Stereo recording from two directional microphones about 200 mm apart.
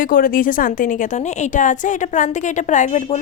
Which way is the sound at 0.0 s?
45° left (ahead or behind).